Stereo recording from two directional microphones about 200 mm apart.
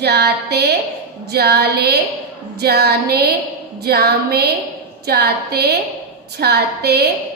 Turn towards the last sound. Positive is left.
turn(degrees=-55)  # may be behind; listen again after turning